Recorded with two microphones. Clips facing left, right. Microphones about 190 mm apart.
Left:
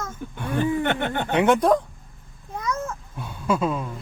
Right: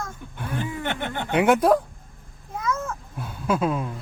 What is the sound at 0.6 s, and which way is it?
Chuckle, 60° left (ahead or behind).